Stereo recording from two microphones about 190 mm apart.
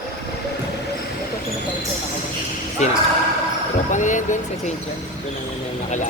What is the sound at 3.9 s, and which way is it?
Speech, 40° left (ahead or behind).